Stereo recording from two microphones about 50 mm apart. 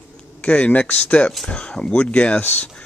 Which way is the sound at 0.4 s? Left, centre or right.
Left.